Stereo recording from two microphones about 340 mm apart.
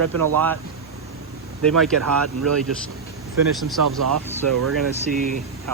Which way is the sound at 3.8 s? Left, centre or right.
Right.